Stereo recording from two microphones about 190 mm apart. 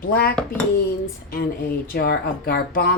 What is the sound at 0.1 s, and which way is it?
Speech, 50° left (ahead or behind).